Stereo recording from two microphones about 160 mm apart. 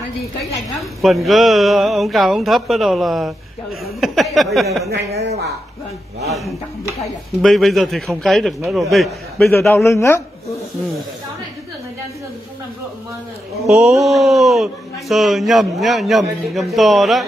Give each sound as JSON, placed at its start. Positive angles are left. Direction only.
{"t": 0.7, "sound": "speech", "side_deg": 0}
{"t": 5.1, "sound": "speech", "side_deg": -40}
{"t": 6.2, "sound": "speech", "side_deg": 0}
{"t": 9.8, "sound": "a woman's voice", "side_deg": 15}
{"t": 13.7, "sound": "speech", "side_deg": 0}